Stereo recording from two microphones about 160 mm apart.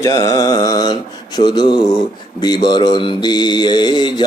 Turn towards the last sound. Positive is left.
turn(degrees=30)  # may be behind; listen again after turning